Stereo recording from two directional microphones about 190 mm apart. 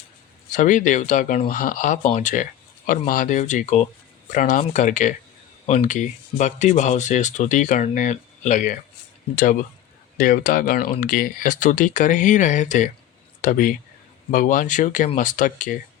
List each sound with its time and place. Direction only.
0.5 s speech: 45° left (ahead or behind)